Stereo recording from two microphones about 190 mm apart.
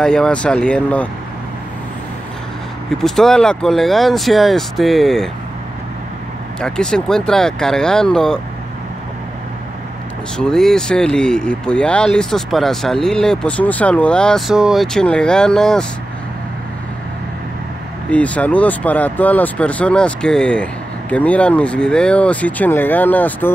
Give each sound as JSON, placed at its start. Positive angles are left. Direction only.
{"t": 0.0, "sound": "speech", "side_deg": 5}
{"t": 3.0, "sound": "speech", "side_deg": 0}
{"t": 6.6, "sound": "speech", "side_deg": 5}
{"t": 10.3, "sound": "speech", "side_deg": 5}
{"t": 18.1, "sound": "speech", "side_deg": 5}